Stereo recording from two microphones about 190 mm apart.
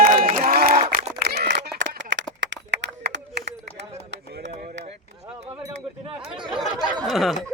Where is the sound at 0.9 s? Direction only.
50° right (ahead or behind); by 2.2 s 70° right (ahead or behind).